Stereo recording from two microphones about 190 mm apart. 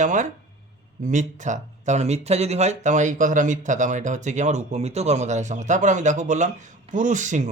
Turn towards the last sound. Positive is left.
turn(degrees=-40)  # may be behind; listen again after turning